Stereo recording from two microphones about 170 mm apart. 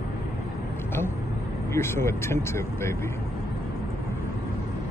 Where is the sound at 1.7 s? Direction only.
15° left (ahead or behind).